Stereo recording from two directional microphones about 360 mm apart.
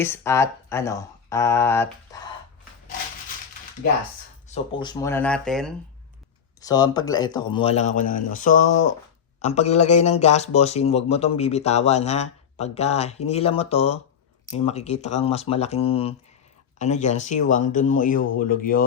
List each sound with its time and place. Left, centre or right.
0.0 s a man's voice: centre
2.1 s a sound: centre
4.4 s a man's voice: centre